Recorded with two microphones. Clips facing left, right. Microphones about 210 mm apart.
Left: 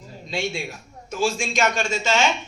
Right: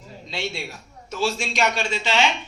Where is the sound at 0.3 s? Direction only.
50° left (ahead or behind).